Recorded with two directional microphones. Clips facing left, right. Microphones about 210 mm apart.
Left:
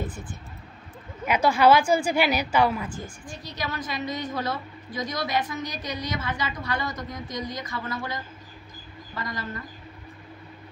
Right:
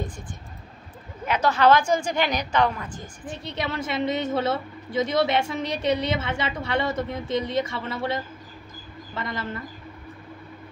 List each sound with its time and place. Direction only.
1.2 s a woman's voice: 10° left (ahead or behind)
3.4 s a woman's voice: 25° right (ahead or behind)